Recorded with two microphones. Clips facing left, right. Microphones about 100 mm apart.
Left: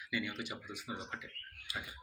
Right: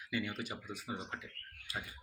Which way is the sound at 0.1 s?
40° right (ahead or behind).